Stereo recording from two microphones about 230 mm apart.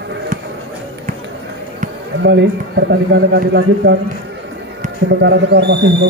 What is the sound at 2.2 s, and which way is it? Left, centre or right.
A man's voice, right.